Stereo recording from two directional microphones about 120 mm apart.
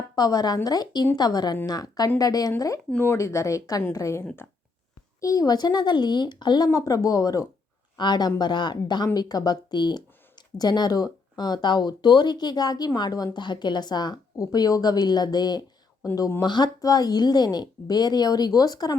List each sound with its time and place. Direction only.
0.2 s speech: 30° left (ahead or behind)